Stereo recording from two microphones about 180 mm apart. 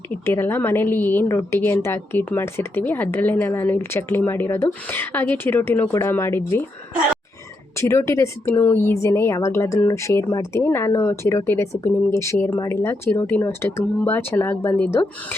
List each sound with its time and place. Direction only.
0.1 s a woman's voice: 15° left (ahead or behind)
7.8 s a woman's voice: 15° left (ahead or behind)